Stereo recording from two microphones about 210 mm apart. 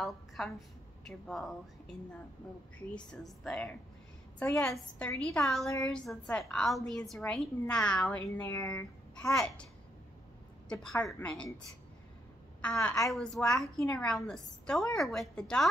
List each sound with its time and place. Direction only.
0.0 s a woman's voice: centre (ahead or behind)
10.7 s a woman's voice: 5° left (ahead or behind)
12.6 s a woman's voice: 5° left (ahead or behind)